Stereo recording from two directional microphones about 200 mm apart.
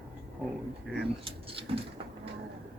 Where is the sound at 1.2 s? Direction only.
25° right (ahead or behind).